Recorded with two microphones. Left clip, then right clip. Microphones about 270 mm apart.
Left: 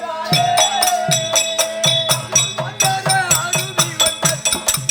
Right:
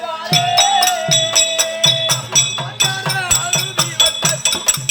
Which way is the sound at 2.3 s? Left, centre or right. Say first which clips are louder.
Right 2 dB; centre.